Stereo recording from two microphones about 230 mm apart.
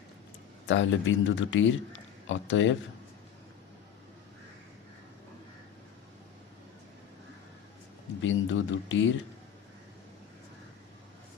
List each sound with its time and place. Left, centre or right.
0.7 s speech: left
8.2 s speech: left